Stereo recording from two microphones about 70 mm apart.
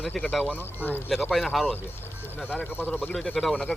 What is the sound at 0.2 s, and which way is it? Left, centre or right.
Speech, centre.